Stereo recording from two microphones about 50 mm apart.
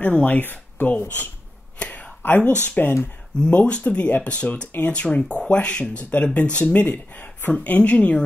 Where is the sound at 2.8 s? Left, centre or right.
Left.